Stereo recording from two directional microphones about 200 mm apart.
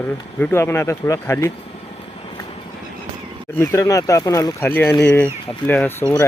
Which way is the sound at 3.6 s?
15° left (ahead or behind).